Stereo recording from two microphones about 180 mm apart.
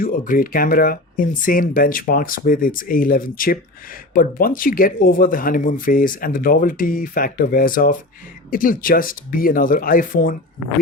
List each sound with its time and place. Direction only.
0.0 s speech: 50° left (ahead or behind)